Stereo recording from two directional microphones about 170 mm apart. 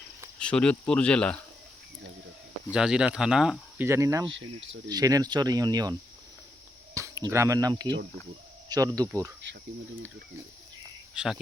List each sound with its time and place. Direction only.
0.3 s speech: 5° left (ahead or behind)
2.7 s speech: 5° right (ahead or behind)
3.8 s speech: 15° right (ahead or behind)
9.0 s speech: 20° right (ahead or behind)
11.1 s speech: 5° right (ahead or behind)